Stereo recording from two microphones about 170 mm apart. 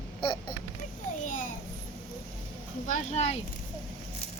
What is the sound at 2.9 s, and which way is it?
Speech, 40° left (ahead or behind).